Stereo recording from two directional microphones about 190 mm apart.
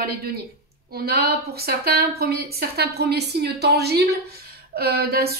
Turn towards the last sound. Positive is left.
turn(degrees=-55)  # may be behind; listen again after turning